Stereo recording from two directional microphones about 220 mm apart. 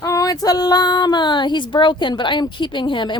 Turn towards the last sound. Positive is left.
turn(degrees=20)  # may be behind; listen again after turning